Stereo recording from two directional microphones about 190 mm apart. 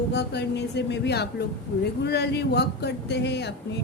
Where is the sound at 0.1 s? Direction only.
60° left (ahead or behind).